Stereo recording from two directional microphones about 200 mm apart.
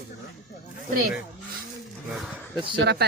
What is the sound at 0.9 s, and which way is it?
Speech, 45° right (ahead or behind).